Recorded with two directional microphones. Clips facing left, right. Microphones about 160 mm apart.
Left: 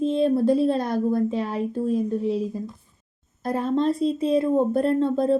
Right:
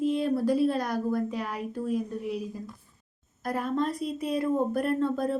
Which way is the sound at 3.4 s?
25° left (ahead or behind).